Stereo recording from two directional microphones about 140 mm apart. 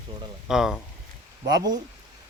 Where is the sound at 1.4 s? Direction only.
30° right (ahead or behind).